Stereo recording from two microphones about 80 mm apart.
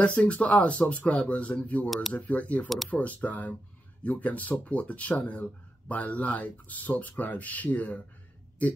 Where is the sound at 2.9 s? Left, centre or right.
Centre.